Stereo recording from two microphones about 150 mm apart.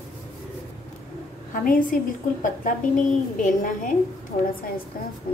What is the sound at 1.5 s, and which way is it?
A woman's voice, 65° left (ahead or behind).